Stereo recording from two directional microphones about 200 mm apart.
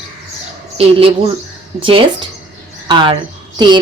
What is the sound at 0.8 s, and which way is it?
A woman's voice, 30° right (ahead or behind).